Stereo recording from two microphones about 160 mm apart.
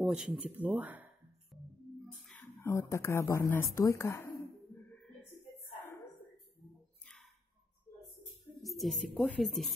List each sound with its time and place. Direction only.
0.0 s speech: 5° right (ahead or behind)
2.2 s speech: 10° left (ahead or behind)
8.6 s speech: centre (ahead or behind)